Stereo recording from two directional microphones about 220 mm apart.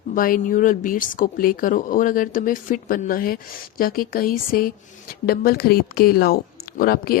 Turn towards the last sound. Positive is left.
turn(degrees=45)  # may be behind; listen again after turning